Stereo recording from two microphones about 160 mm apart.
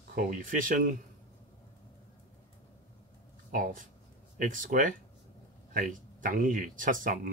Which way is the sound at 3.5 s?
55° right (ahead or behind).